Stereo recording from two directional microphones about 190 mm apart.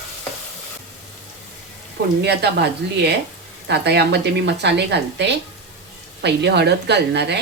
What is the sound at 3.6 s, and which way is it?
Speech, 60° right (ahead or behind).